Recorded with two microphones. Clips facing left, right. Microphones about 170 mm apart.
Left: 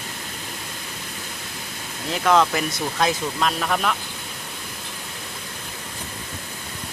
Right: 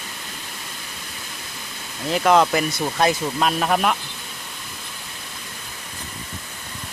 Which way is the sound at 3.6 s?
25° right (ahead or behind).